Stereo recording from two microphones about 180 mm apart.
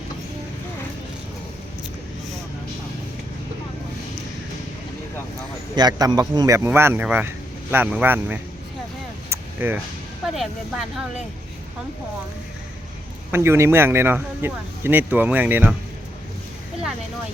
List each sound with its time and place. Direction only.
5.7 s speech: 25° right (ahead or behind)
9.3 s a sound: 10° right (ahead or behind)
10.2 s speech: centre (ahead or behind)
13.3 s speech: 15° right (ahead or behind)